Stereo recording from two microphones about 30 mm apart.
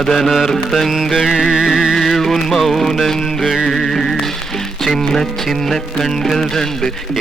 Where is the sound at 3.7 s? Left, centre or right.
Centre.